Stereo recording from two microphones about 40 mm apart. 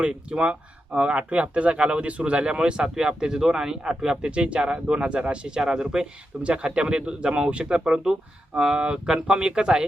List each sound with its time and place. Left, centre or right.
0.0 s speech: right
4.3 s speech: right
5.5 s speech: centre
6.4 s speech: right